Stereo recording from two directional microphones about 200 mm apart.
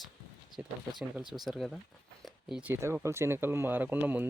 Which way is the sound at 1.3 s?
Centre (ahead or behind).